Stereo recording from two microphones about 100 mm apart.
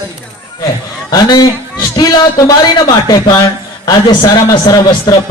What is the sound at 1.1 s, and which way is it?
A man's voice, 40° left (ahead or behind).